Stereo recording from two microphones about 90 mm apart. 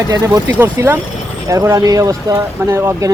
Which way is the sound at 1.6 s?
40° right (ahead or behind).